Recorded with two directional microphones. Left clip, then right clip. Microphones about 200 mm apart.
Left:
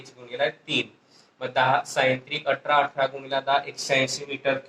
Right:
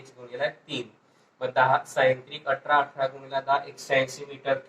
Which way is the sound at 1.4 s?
35° left (ahead or behind).